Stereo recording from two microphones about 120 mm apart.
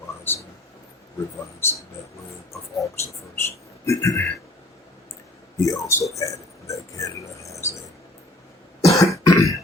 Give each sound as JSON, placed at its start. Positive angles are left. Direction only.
{"t": 0.3, "sound": "a sound", "side_deg": 15}
{"t": 2.5, "sound": "speech", "side_deg": 25}
{"t": 5.5, "sound": "speech", "side_deg": 25}
{"t": 8.9, "sound": "cough", "side_deg": 25}